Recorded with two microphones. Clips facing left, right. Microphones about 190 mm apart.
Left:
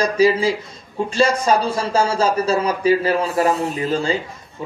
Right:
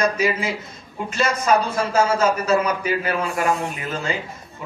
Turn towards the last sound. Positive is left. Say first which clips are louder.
# left 6 dB
turn(degrees=30)  # may be behind; listen again after turning